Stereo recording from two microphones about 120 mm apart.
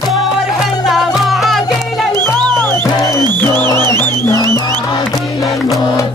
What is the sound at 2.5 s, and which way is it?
Music, 20° left (ahead or behind).